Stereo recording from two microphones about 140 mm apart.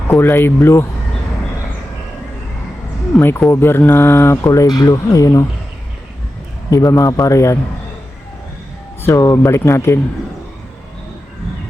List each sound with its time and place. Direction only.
0.1 s speech: 15° left (ahead or behind)
3.2 s speech: 15° left (ahead or behind)
6.7 s speech: 25° left (ahead or behind)
9.0 s speech: 20° left (ahead or behind)